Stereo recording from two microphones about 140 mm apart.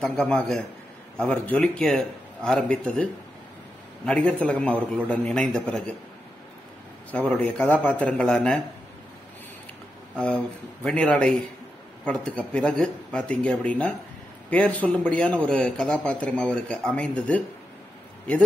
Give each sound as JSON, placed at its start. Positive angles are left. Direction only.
{"t": 0.0, "sound": "a man's voice", "side_deg": 5}
{"t": 7.1, "sound": "a man's voice", "side_deg": 10}
{"t": 10.1, "sound": "a man's voice", "side_deg": 10}